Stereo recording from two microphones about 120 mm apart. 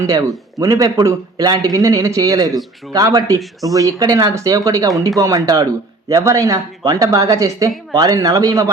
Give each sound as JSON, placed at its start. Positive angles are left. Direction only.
{"t": 0.0, "sound": "a man's voice", "side_deg": -30}